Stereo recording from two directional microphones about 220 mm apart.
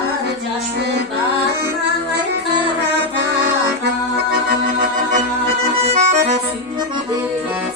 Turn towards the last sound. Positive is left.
turn(degrees=-30)  # may be behind; listen again after turning